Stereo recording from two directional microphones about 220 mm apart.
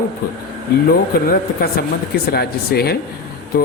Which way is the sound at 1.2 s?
45° left (ahead or behind).